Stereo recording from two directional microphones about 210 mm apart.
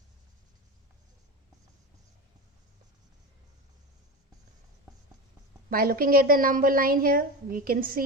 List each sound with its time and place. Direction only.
5.7 s a woman's voice: 45° right (ahead or behind)